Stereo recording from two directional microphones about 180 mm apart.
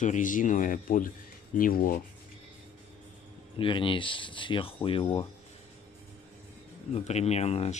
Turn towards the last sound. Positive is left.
turn(degrees=35)  # may be behind; listen again after turning